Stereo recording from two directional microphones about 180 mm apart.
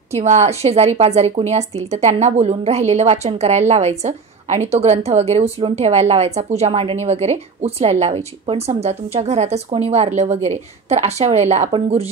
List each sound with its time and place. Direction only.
0.1 s a woman's voice: 40° right (ahead or behind)